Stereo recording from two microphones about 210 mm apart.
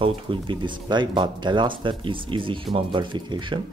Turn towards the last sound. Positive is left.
turn(degrees=-20)  # may be behind; listen again after turning